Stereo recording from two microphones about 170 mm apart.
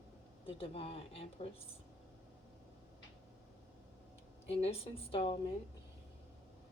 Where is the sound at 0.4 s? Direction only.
35° left (ahead or behind).